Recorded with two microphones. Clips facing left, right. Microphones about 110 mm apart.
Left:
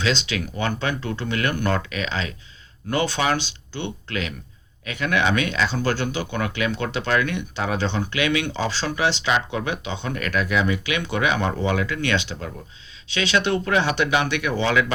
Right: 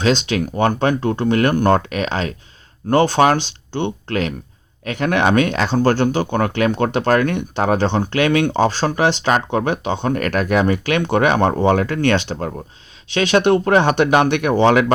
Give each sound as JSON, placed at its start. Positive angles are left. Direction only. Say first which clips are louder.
{"t": 0.0, "sound": "speech", "louder": "right 7 dB", "side_deg": -50}